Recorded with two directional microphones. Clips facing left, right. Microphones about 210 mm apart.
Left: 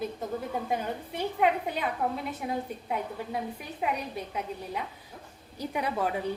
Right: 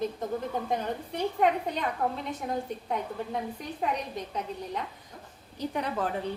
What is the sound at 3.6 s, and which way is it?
A woman's voice, 10° left (ahead or behind).